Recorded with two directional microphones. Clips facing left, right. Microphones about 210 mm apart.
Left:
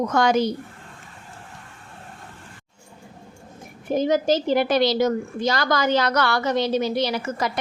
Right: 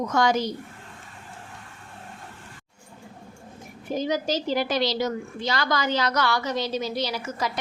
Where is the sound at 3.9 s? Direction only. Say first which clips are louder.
Left 6 dB; 55° left (ahead or behind).